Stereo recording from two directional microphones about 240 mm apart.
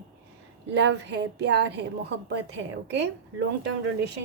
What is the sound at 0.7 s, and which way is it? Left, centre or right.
Speech, right.